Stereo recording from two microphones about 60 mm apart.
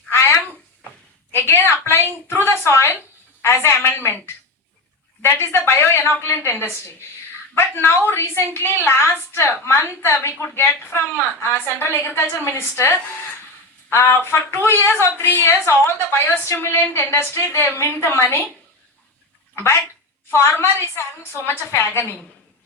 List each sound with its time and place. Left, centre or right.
0.1 s a sound: left
2.2 s a woman's voice: left
5.2 s a woman's voice: left
20.3 s a woman's voice: left